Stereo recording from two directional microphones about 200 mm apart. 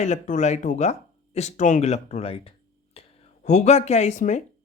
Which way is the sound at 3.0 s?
30° left (ahead or behind).